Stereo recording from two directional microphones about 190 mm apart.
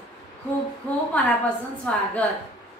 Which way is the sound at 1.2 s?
5° left (ahead or behind).